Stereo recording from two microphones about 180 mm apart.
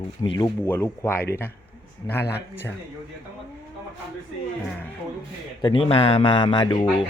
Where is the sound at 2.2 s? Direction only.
65° left (ahead or behind).